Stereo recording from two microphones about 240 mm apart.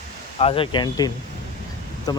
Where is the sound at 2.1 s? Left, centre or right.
Centre.